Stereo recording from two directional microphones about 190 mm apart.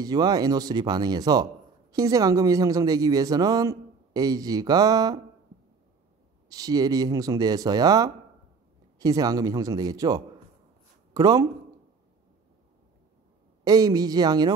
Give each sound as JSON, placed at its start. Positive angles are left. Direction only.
{"t": 0.0, "sound": "speech", "side_deg": -20}
{"t": 6.5, "sound": "speech", "side_deg": -20}
{"t": 13.7, "sound": "speech", "side_deg": -20}